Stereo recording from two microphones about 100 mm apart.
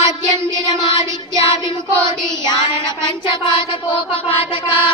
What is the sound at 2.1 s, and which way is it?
Child singing, 50° left (ahead or behind).